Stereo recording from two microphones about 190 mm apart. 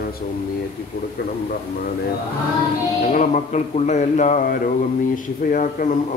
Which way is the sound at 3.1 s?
40° left (ahead or behind).